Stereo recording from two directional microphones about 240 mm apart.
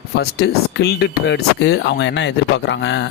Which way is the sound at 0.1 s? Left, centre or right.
Left.